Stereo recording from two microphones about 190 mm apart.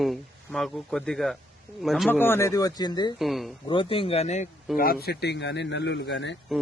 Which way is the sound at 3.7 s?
25° left (ahead or behind).